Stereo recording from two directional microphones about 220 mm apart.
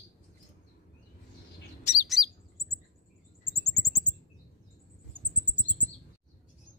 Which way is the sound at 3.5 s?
Centre (ahead or behind).